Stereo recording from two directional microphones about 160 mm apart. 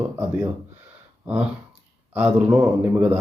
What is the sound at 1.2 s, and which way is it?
Speech, 10° right (ahead or behind).